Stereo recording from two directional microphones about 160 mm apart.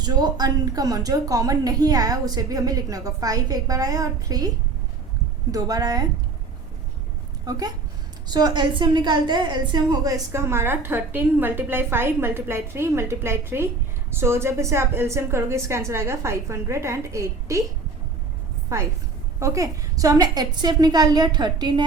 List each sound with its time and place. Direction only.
0.0 s a woman's voice: 25° right (ahead or behind)
7.4 s a woman's voice: 25° right (ahead or behind)
18.7 s a woman's voice: 20° right (ahead or behind)